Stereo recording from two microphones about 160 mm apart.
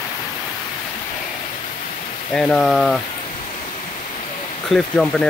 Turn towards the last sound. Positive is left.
turn(degrees=5)  # may be behind; listen again after turning